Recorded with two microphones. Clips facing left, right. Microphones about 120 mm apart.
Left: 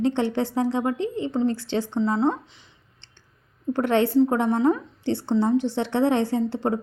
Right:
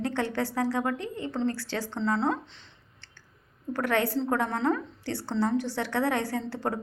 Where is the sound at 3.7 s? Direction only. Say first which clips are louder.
Left 7 dB; 25° left (ahead or behind).